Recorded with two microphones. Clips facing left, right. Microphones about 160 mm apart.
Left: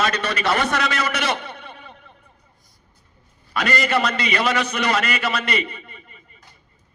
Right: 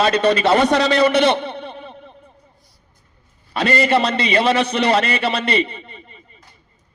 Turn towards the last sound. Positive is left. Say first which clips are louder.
# right 3 dB
turn(degrees=-25)  # may be behind; listen again after turning